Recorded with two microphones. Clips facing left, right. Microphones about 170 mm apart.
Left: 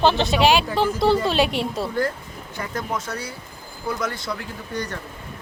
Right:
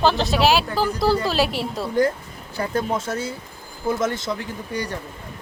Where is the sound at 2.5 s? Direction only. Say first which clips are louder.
Right 5 dB; 30° right (ahead or behind).